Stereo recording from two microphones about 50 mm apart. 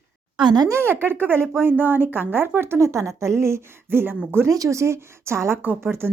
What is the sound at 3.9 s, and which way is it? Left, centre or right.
Speech, right.